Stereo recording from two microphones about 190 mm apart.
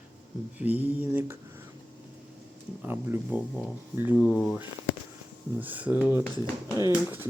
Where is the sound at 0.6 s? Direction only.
10° right (ahead or behind).